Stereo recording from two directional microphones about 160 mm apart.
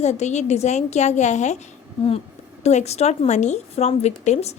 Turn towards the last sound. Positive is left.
turn(degrees=40)  # may be behind; listen again after turning